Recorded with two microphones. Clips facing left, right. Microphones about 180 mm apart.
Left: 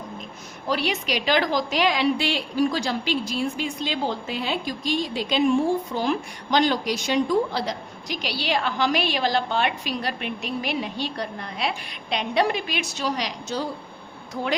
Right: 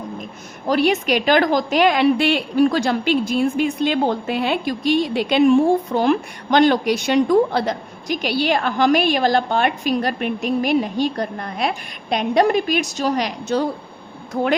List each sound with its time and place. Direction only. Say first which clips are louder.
0.7 s a woman's voice: right 8 dB; 50° right (ahead or behind)